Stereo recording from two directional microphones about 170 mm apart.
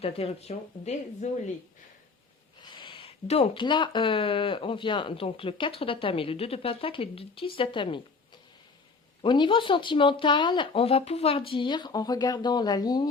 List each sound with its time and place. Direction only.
0.0 s speech: 35° left (ahead or behind)
2.6 s speech: 25° left (ahead or behind)
9.2 s speech: 30° left (ahead or behind)